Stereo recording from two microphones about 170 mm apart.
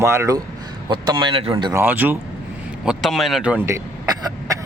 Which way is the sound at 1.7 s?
10° right (ahead or behind).